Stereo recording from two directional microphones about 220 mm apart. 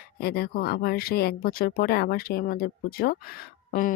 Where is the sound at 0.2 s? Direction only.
45° left (ahead or behind).